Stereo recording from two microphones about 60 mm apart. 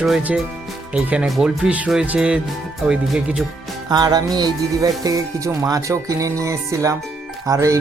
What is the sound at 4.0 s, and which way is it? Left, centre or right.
Music, right.